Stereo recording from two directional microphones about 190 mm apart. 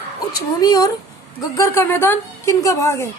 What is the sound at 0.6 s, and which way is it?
A woman's voice, 20° left (ahead or behind).